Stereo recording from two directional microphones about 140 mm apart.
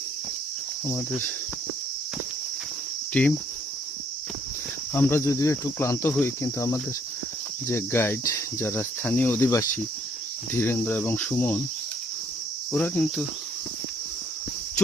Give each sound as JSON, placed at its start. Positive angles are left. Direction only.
{"t": 0.9, "sound": "cricket", "side_deg": 15}
{"t": 3.1, "sound": "cricket", "side_deg": 10}
{"t": 4.9, "sound": "speech", "side_deg": 15}
{"t": 7.7, "sound": "cricket", "side_deg": 20}
{"t": 12.7, "sound": "cricket", "side_deg": 10}